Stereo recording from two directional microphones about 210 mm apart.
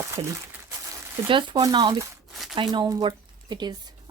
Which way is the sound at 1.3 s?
20° right (ahead or behind).